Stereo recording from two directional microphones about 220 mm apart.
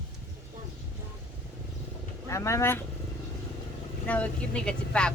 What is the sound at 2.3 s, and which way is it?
Speech, 15° left (ahead or behind).